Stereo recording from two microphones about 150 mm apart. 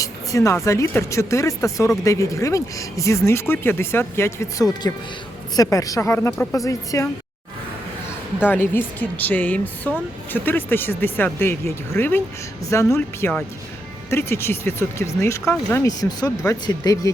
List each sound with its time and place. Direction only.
0.0 s speech: 20° left (ahead or behind)
8.4 s speech: 15° left (ahead or behind)